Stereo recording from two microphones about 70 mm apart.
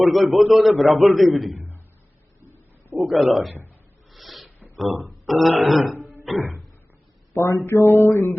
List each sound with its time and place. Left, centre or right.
0.0 s a man's voice: centre
1.5 s beatboxing: right
2.4 s a sound: right
3.0 s a man's voice: centre
4.1 s a sound: centre
4.8 s a man's voice: centre
6.3 s music: centre
7.3 s speech: left
7.6 s music: left